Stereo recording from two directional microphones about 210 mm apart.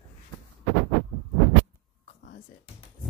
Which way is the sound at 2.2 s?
60° left (ahead or behind).